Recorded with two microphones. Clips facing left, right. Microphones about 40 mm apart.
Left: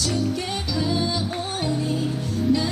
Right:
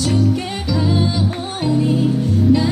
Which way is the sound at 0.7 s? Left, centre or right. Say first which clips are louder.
Right 6 dB; right.